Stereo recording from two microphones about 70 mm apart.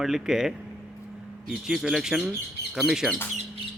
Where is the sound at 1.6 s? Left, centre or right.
Centre.